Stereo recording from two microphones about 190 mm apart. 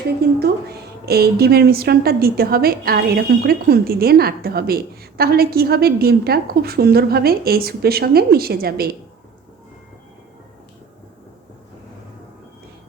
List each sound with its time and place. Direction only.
0.3 s a woman's voice: 55° right (ahead or behind)